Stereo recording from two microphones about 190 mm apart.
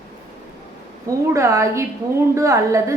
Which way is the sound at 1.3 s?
15° right (ahead or behind).